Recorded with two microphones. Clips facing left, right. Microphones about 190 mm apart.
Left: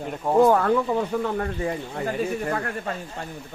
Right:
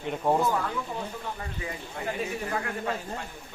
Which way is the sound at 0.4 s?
60° left (ahead or behind).